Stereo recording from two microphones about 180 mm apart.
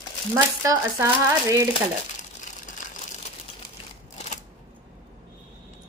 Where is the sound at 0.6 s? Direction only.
20° right (ahead or behind).